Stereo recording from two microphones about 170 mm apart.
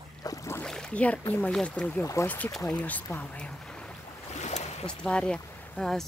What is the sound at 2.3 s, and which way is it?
Speech, 10° left (ahead or behind).